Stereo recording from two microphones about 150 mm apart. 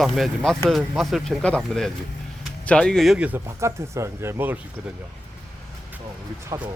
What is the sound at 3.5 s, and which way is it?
Speech, 20° right (ahead or behind).